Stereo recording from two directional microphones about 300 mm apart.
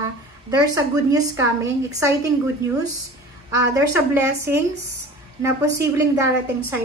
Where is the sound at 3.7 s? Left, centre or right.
Centre.